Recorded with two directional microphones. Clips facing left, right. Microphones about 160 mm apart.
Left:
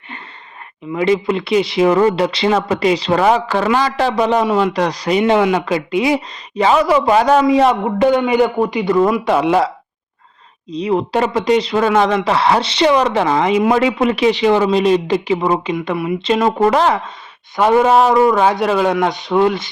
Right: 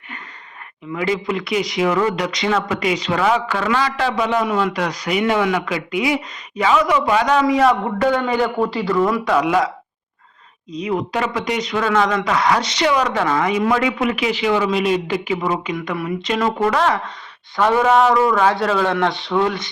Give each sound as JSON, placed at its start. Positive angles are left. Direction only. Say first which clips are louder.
{"t": 0.9, "sound": "a man's voice", "louder": "left 6 dB", "side_deg": 25}